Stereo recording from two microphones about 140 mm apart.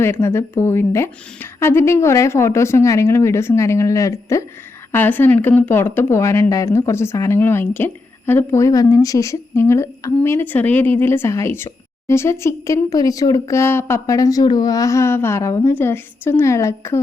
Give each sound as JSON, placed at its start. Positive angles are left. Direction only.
{"t": 0.0, "sound": "a woman's voice", "side_deg": 15}